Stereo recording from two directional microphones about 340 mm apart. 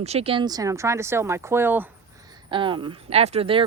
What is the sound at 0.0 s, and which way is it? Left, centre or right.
Speech, centre.